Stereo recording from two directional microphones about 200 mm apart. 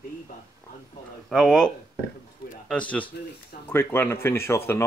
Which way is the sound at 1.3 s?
Centre (ahead or behind).